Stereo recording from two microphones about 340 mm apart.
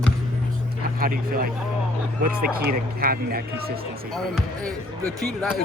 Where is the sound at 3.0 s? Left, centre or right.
Right.